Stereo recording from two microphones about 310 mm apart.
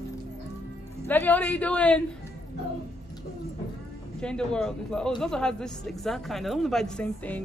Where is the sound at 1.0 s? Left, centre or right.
Centre.